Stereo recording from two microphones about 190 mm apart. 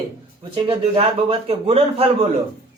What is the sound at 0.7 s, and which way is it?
A man's voice, 25° right (ahead or behind).